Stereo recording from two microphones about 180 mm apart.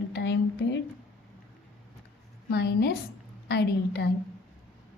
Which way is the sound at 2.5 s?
65° left (ahead or behind).